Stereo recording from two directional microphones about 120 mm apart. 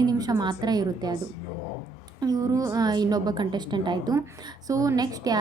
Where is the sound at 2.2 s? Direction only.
30° right (ahead or behind).